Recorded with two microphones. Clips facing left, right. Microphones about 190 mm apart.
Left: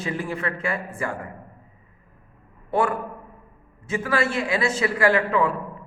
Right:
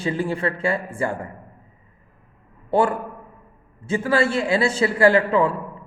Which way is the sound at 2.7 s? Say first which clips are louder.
Right 3 dB; 30° right (ahead or behind).